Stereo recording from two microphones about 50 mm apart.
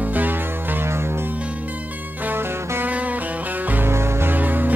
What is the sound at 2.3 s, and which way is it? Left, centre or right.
Music, right.